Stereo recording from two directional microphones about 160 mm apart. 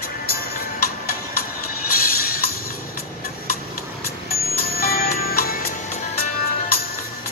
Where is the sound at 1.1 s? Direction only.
70° left (ahead or behind).